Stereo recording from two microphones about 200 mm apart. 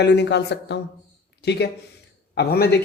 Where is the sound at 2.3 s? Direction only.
55° left (ahead or behind).